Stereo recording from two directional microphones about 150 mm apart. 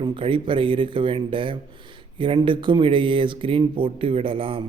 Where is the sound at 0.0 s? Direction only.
35° right (ahead or behind).